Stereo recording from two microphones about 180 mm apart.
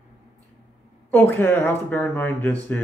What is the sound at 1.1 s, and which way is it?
Speech, 10° left (ahead or behind).